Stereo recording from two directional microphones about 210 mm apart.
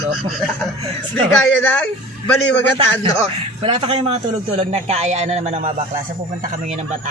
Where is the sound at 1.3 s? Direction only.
5° left (ahead or behind).